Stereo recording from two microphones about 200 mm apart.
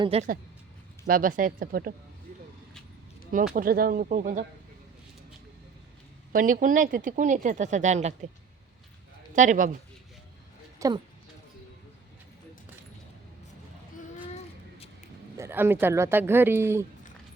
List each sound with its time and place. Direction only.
0.0 s speech: 30° right (ahead or behind)
1.0 s speech: 45° right (ahead or behind)
3.5 s speech: 45° right (ahead or behind)
6.3 s speech: 40° right (ahead or behind)
9.3 s speech: 40° right (ahead or behind)
10.8 s a woman's voice: 20° right (ahead or behind)
15.4 s speech: 10° right (ahead or behind)